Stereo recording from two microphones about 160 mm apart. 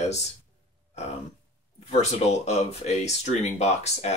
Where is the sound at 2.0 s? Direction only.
45° left (ahead or behind).